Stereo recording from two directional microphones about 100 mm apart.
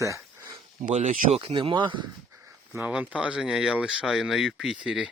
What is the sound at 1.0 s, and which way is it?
Speech, 75° right (ahead or behind).